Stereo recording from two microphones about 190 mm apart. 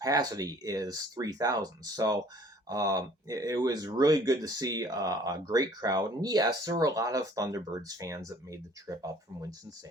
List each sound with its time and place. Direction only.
0.0 s speech: 20° right (ahead or behind)